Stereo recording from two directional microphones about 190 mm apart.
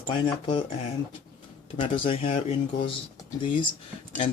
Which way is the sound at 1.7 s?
30° left (ahead or behind).